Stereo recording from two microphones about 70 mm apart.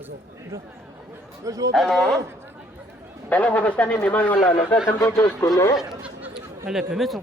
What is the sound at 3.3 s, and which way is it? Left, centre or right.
A man's voice, left.